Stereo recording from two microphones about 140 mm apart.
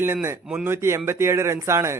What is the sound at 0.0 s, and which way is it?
A man's voice, 15° right (ahead or behind).